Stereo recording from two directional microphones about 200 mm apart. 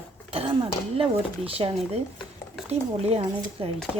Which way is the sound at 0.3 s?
25° right (ahead or behind).